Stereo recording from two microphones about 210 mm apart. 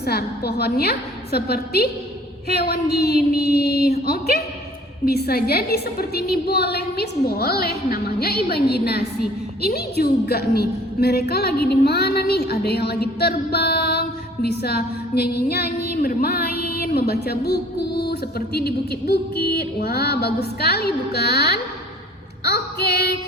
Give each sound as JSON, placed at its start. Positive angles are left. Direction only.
{"t": 0.0, "sound": "a woman's voice", "side_deg": 50}